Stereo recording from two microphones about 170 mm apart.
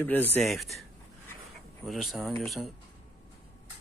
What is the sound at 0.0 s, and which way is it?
Speech, 10° left (ahead or behind).